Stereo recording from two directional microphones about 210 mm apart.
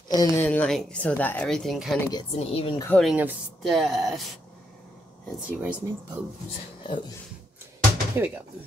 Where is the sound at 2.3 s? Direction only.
30° left (ahead or behind).